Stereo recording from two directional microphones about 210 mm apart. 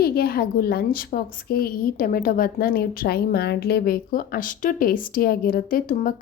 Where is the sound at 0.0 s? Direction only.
45° left (ahead or behind).